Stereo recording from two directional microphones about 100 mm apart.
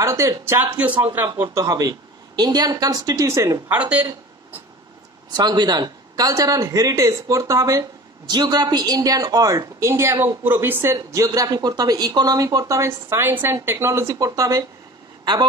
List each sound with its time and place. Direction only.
0.0 s a woman's voice: 30° right (ahead or behind)
0.7 s speech: 15° right (ahead or behind)
1.4 s a woman's voice: 30° right (ahead or behind)
3.7 s speech: 10° right (ahead or behind)
5.3 s a woman's voice: 45° right (ahead or behind)
8.3 s a woman's voice: 45° right (ahead or behind)